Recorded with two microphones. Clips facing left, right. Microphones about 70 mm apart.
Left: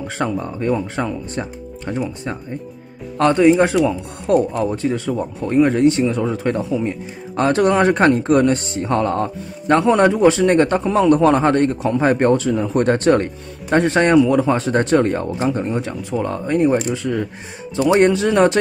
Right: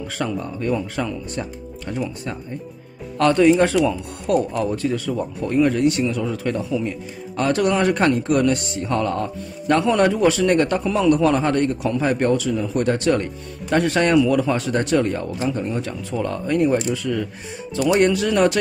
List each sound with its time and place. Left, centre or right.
0.2 s speech: left
13.7 s speech: left